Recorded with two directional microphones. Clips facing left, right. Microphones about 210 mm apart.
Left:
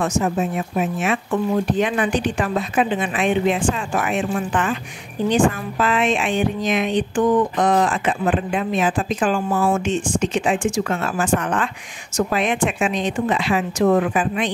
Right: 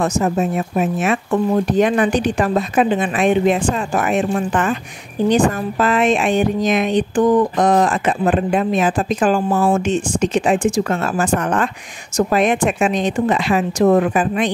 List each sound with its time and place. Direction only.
0.0 s speech: 40° right (ahead or behind)